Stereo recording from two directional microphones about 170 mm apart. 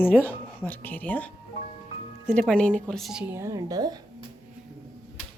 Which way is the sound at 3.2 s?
15° right (ahead or behind).